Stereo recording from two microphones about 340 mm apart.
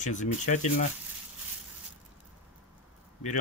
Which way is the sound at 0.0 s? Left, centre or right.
Left.